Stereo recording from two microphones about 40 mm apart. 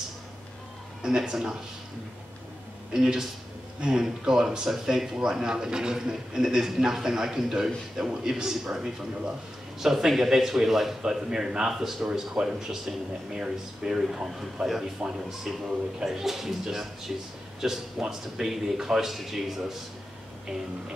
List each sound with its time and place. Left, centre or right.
1.0 s speech: centre
2.9 s speech: centre
15.0 s speech: right
15.5 s speech: centre